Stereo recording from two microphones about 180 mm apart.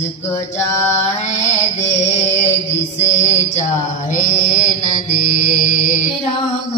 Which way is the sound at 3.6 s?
45° left (ahead or behind).